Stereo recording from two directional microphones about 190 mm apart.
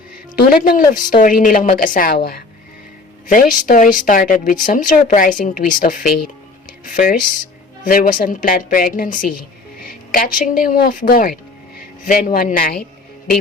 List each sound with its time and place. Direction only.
0.3 s a woman's voice: 50° left (ahead or behind)